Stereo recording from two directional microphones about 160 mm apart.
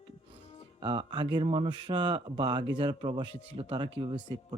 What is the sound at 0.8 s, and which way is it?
Speech, 30° right (ahead or behind).